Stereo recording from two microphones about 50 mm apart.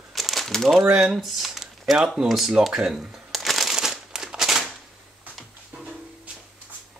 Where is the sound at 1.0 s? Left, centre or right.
Centre.